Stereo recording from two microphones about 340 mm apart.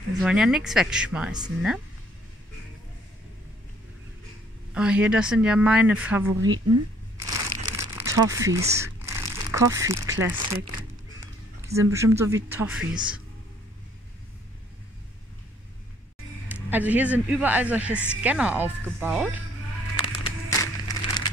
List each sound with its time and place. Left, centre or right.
0.2 s speech: centre
4.7 s speech: centre
6.4 s speech: right
7.2 s crumpling: centre
11.6 s speech: centre
16.4 s speech: centre
20.0 s music: centre